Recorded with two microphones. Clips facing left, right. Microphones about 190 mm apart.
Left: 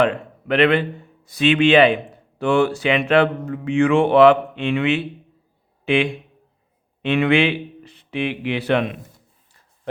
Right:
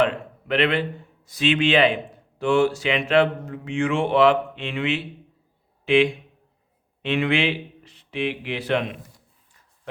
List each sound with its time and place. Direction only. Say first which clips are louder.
0.0 s a man's voice: left 3 dB; 60° left (ahead or behind)